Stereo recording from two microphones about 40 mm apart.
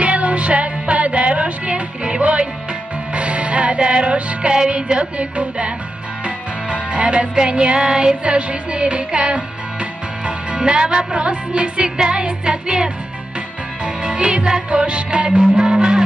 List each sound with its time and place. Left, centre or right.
0.0 s music: right
14.0 s music: right